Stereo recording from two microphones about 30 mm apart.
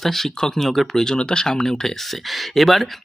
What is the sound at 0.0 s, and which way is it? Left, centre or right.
Speech, centre.